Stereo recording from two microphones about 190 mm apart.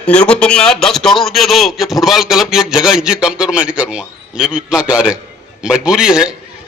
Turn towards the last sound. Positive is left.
turn(degrees=-5)  # may be behind; listen again after turning